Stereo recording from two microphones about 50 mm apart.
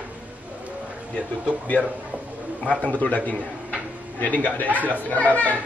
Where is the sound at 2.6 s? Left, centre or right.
Left.